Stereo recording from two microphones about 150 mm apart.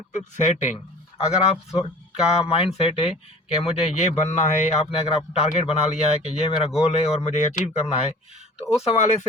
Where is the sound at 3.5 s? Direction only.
45° left (ahead or behind).